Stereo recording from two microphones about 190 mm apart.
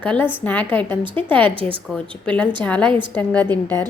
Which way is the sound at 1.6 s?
30° right (ahead or behind).